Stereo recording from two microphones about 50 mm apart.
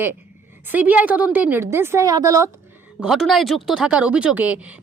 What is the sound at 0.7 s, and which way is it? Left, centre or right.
Speech, right.